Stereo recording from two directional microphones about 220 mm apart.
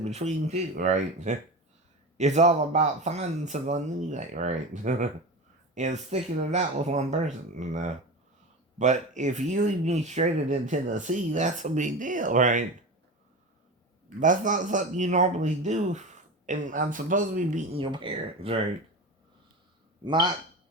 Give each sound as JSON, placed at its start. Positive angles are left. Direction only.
{"t": 0.0, "sound": "speech", "side_deg": -30}
{"t": 14.2, "sound": "speech", "side_deg": -35}
{"t": 17.7, "sound": "speech", "side_deg": -25}
{"t": 20.1, "sound": "speech", "side_deg": -20}